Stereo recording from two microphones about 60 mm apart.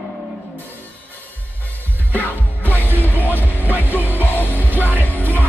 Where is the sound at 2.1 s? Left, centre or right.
Left.